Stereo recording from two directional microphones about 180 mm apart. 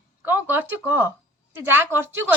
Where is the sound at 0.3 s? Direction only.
10° right (ahead or behind).